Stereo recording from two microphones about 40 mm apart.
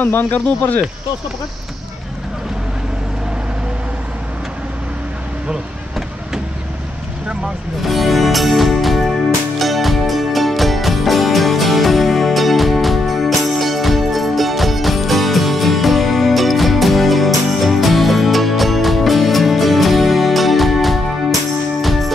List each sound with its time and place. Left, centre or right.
0.0 s speech: left
7.8 s music: centre